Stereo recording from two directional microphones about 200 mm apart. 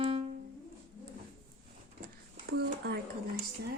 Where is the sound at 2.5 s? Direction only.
50° right (ahead or behind).